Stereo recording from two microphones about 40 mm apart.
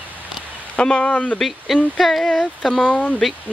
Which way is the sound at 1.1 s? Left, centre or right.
Left.